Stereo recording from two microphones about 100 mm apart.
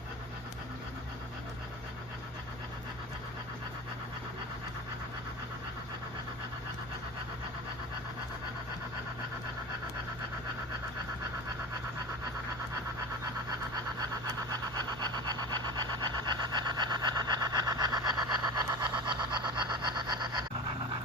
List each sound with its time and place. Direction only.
14.5 s vehicle: 45° right (ahead or behind)